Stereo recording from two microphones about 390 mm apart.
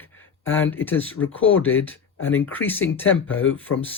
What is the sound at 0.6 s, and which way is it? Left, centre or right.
Speech, centre.